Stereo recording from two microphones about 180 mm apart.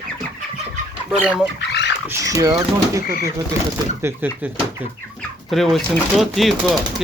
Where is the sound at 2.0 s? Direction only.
20° right (ahead or behind).